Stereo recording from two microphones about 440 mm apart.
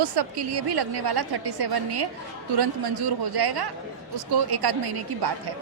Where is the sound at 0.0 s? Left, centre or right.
Right.